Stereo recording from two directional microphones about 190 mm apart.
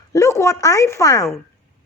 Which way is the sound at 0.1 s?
15° left (ahead or behind).